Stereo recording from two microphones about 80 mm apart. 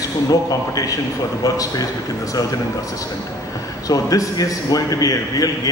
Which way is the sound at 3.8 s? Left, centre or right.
Left.